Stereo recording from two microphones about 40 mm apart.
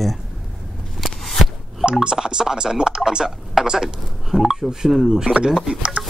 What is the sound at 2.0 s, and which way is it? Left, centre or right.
Speech, centre.